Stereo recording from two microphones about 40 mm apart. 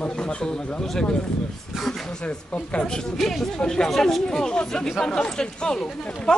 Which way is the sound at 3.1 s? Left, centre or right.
Centre.